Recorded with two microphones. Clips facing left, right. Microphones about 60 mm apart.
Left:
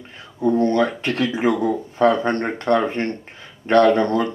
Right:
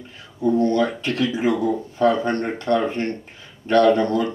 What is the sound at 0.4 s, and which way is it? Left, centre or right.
Speech, left.